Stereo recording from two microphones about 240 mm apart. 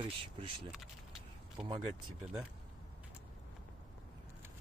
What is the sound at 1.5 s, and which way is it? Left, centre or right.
Speech, centre.